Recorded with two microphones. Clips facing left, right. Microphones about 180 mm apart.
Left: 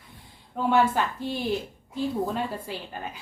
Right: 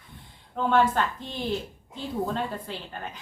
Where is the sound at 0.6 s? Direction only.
10° left (ahead or behind).